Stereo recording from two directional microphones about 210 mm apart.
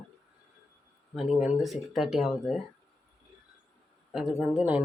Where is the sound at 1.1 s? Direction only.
5° right (ahead or behind).